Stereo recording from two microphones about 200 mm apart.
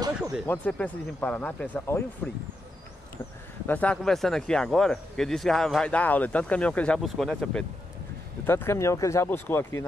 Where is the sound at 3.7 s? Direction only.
5° left (ahead or behind).